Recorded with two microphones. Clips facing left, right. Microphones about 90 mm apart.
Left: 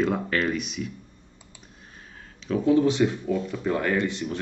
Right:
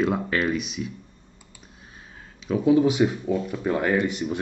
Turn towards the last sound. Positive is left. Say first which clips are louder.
# right 2 dB
turn(degrees=-15)  # may be behind; listen again after turning